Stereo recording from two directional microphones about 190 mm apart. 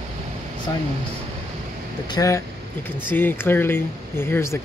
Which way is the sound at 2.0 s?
20° left (ahead or behind).